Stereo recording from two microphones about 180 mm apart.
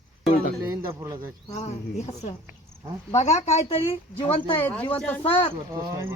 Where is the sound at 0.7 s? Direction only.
20° right (ahead or behind).